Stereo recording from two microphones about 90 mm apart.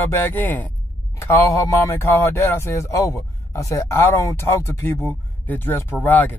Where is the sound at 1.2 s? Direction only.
35° left (ahead or behind).